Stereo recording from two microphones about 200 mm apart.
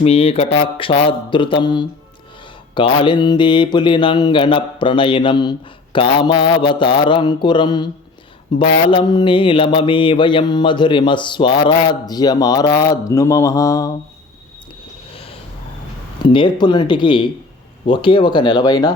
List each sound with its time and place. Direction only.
0.0 s mantra: 30° left (ahead or behind)
16.2 s mantra: 25° left (ahead or behind)